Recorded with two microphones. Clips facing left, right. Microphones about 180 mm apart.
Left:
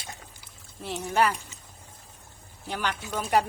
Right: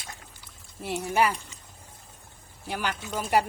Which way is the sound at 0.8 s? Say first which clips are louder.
Even; 10° right (ahead or behind).